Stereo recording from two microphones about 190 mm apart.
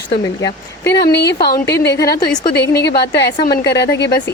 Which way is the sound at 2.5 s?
65° left (ahead or behind).